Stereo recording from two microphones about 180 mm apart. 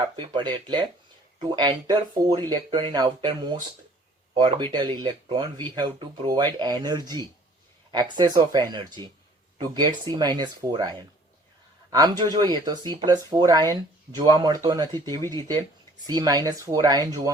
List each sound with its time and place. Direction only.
0.0 s speech: 25° right (ahead or behind)